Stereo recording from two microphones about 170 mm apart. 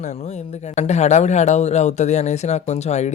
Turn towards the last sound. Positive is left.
turn(degrees=40)  # may be behind; listen again after turning